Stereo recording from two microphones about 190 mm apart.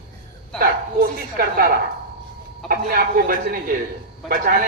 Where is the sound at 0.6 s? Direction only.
50° right (ahead or behind).